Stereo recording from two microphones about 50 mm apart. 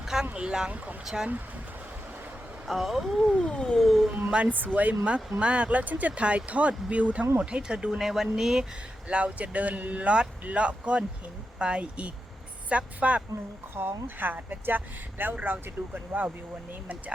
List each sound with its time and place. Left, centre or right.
0.0 s boat: centre
0.3 s speech: centre
1.1 s speech: centre
2.6 s speech: centre
3.4 s cat: centre
3.8 s speech: centre
4.2 s speech: right
4.5 s speech: right
5.4 s speech: right
7.9 s speech: centre
9.0 s speech: right
13.7 s speech: right